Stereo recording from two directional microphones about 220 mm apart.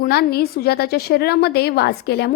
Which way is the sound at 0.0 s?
45° left (ahead or behind).